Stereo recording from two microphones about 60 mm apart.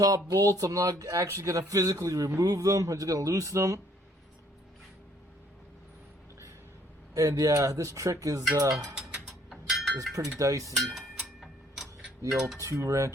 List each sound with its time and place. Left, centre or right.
0.0 s a man's voice: right
1.5 s a man's voice: right
7.1 s a man's voice: right
9.0 s a sound: centre
10.2 s a sound: right
10.8 s speech: centre
11.1 s tick-tock: centre
12.3 s mechanisms: centre
12.5 s a sound: right